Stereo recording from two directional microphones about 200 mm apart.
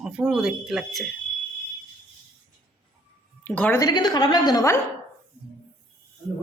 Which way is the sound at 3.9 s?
20° left (ahead or behind).